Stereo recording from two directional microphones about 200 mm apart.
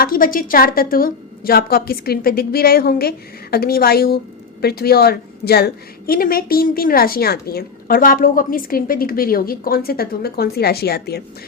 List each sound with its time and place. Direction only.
0.0 s a woman's voice: 45° left (ahead or behind)